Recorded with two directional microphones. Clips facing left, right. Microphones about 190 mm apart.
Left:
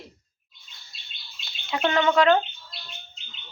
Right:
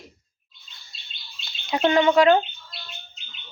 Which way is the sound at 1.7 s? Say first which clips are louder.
Right 4 dB; 15° right (ahead or behind).